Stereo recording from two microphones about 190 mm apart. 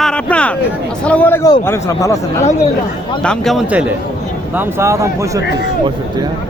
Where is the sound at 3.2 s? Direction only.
5° left (ahead or behind).